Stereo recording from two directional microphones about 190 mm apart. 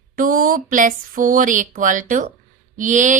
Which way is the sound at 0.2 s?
45° right (ahead or behind).